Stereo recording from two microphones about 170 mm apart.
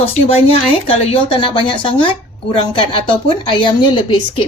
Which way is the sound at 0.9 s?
35° left (ahead or behind).